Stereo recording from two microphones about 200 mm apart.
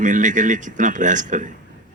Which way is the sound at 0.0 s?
40° right (ahead or behind).